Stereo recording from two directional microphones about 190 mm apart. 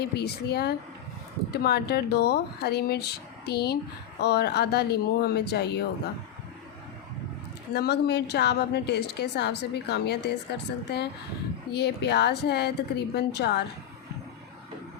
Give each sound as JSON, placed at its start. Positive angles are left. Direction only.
{"t": 0.0, "sound": "a woman's voice", "side_deg": 60}
{"t": 7.7, "sound": "a woman's voice", "side_deg": 60}